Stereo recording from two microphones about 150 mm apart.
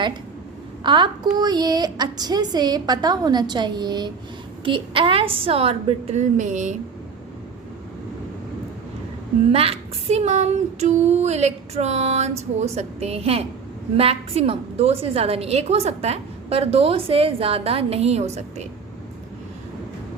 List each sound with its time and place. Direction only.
0.9 s a woman's voice: 30° right (ahead or behind); by 6.7 s 55° right (ahead or behind)
9.5 s female singing: 40° right (ahead or behind)
13.9 s a woman's voice: 40° right (ahead or behind)